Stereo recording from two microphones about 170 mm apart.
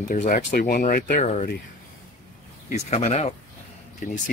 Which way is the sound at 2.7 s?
40° left (ahead or behind).